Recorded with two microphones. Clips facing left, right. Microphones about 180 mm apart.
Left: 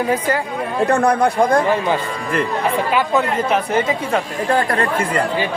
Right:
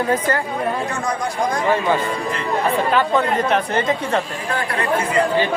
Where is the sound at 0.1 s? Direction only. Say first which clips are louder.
Left 1 dB; 10° left (ahead or behind).